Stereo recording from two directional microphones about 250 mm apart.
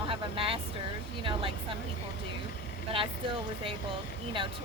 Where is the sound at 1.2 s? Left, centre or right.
Right.